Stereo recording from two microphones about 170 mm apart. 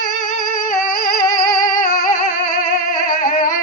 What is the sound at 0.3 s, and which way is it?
Singing, 50° left (ahead or behind).